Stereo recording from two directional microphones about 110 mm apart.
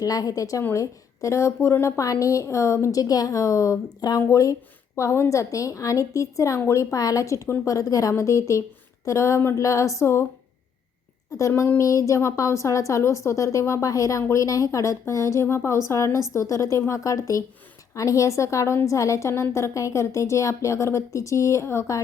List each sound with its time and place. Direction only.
0.0 s a woman's voice: 35° left (ahead or behind)
11.3 s a woman's voice: 25° left (ahead or behind)